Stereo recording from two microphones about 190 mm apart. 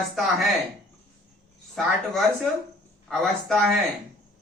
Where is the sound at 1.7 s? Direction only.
Centre (ahead or behind).